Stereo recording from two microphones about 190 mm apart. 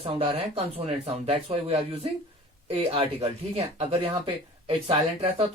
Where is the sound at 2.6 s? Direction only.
30° right (ahead or behind).